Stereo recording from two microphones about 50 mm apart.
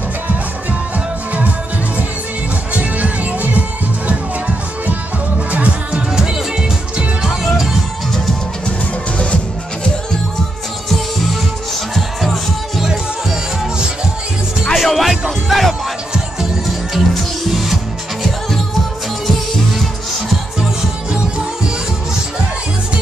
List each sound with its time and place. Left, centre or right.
2.7 s music: right
5.9 s music: centre
11.9 s music: centre
12.8 s music: centre
14.7 s music: centre